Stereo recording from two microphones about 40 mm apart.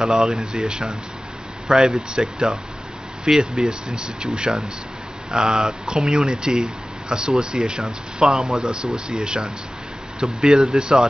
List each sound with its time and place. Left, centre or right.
0.0 s speech: centre